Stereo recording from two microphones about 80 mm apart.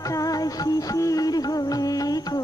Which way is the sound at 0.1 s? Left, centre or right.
Left.